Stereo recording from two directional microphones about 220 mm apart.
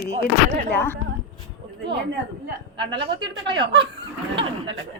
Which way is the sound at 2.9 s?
20° right (ahead or behind).